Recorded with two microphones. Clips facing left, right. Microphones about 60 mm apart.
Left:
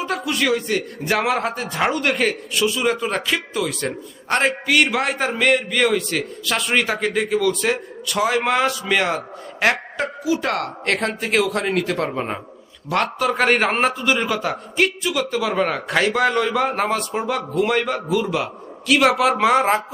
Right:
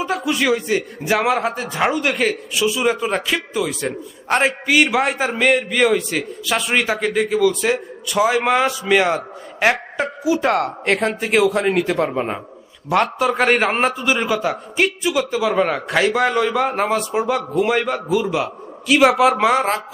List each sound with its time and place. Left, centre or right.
0.0 s a man's voice: centre
10.2 s a man's voice: centre